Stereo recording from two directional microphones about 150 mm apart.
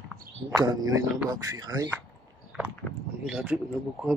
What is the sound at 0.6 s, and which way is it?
A man's voice, 25° right (ahead or behind).